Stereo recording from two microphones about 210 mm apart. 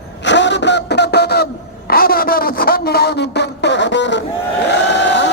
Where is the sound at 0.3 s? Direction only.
60° left (ahead or behind).